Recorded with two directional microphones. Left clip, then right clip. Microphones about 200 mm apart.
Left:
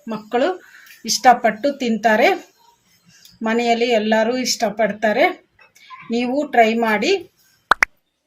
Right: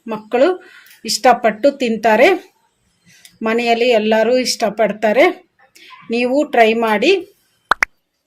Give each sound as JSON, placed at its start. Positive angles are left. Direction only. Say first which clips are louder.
{"t": 0.0, "sound": "speech", "louder": "right 5 dB", "side_deg": -30}
{"t": 3.4, "sound": "speech", "louder": "right 3 dB", "side_deg": -35}
{"t": 7.7, "sound": "plop", "louder": "even", "side_deg": 0}